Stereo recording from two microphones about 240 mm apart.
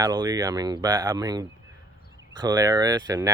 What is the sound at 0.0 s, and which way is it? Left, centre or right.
Speech, centre.